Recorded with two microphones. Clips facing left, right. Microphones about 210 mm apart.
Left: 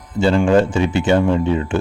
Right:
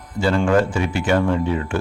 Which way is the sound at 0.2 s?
25° left (ahead or behind).